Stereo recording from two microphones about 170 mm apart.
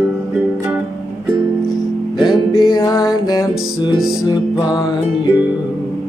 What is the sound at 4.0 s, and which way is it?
Music, 5° right (ahead or behind).